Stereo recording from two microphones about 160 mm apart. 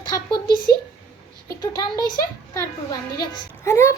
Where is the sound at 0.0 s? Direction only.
25° left (ahead or behind).